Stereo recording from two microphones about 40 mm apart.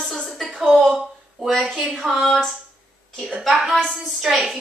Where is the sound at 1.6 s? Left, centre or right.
Centre.